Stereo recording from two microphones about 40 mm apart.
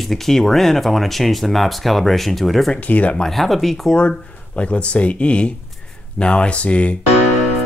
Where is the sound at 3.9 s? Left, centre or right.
Left.